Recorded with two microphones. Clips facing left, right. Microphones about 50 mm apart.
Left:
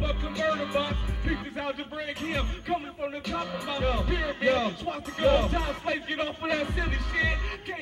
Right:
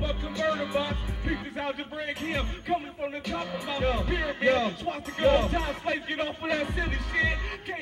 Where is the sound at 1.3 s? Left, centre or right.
Right.